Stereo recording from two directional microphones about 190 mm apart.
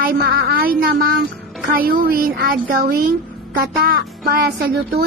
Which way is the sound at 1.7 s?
50° right (ahead or behind).